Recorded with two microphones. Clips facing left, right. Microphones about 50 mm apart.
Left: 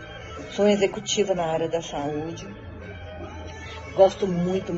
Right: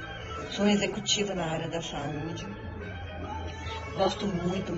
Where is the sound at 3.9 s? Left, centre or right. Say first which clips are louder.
Left 10 dB; left.